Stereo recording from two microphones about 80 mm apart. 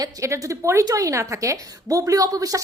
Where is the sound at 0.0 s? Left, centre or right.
Right.